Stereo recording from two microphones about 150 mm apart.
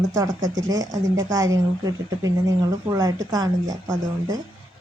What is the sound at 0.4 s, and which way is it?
A woman's voice, 25° right (ahead or behind).